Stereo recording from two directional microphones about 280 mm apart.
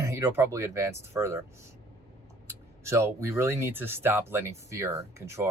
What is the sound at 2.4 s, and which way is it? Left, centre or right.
Speech, centre.